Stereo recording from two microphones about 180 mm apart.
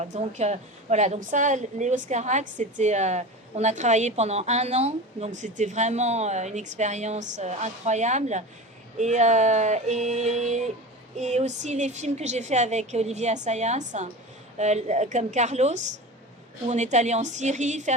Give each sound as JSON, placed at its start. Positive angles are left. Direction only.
{"t": 0.0, "sound": "a woman's voice", "side_deg": -40}